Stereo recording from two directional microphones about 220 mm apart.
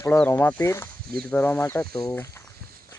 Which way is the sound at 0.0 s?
10° left (ahead or behind).